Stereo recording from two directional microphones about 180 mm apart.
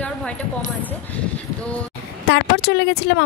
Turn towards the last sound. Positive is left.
turn(degrees=70)  # may be behind; listen again after turning